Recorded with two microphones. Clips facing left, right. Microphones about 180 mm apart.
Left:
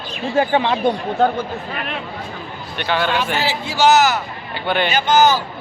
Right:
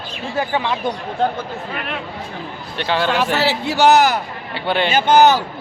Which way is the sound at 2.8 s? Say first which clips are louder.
Right 1 dB; 30° right (ahead or behind).